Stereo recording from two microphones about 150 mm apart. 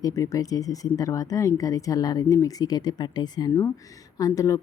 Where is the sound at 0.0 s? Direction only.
20° left (ahead or behind).